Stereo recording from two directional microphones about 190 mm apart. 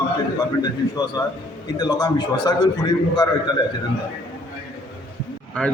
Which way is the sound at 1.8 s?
20° left (ahead or behind).